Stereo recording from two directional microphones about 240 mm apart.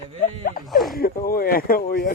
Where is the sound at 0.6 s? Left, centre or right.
Centre.